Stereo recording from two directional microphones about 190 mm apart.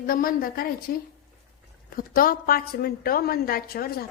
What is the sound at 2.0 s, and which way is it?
A woman's voice, 50° left (ahead or behind).